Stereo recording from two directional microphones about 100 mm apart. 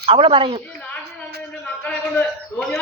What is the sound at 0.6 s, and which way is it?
A man's voice, 15° left (ahead or behind).